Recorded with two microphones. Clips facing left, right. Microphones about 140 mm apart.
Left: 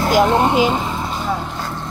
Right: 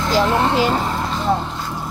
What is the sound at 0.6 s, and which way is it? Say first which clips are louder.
Vehicle: left 1 dB; 5° left (ahead or behind).